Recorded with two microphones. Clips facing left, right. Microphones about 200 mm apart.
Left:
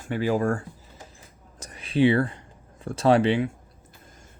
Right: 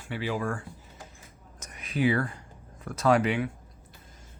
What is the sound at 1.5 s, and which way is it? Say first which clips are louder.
Whispering: left 7 dB; 30° left (ahead or behind).